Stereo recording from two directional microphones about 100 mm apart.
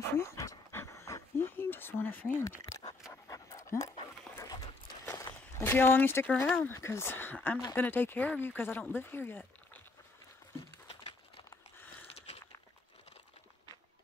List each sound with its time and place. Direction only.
0.2 s pant: 30° left (ahead or behind)
1.5 s a sound: 20° left (ahead or behind)
2.6 s dog: 40° left (ahead or behind)
3.1 s pant: 30° left (ahead or behind)
5.1 s a sound: 25° left (ahead or behind)
6.4 s speech: 20° left (ahead or behind)